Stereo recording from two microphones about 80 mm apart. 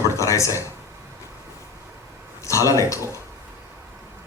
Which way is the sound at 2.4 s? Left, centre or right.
Left.